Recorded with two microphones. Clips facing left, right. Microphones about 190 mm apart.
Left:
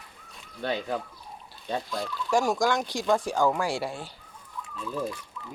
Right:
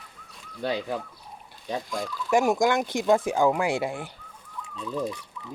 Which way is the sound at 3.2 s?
20° right (ahead or behind).